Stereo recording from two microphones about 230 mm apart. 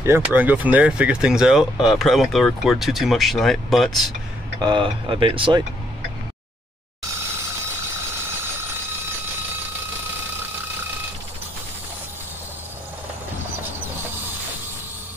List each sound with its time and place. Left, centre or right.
0.0 s speech: centre
4.6 s speech: centre